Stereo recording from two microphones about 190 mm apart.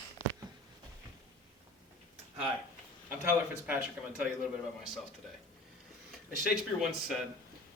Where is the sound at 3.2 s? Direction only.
5° right (ahead or behind).